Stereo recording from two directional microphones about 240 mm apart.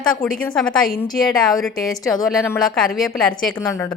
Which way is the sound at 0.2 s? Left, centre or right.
Centre.